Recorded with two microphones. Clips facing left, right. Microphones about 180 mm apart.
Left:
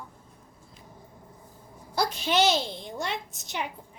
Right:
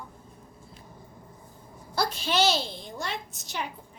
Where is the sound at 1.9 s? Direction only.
20° left (ahead or behind).